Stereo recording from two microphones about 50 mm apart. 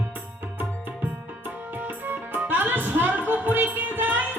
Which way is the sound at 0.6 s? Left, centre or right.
Right.